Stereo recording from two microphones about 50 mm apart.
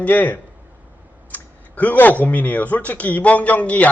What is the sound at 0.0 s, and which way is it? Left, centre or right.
A man's voice, left.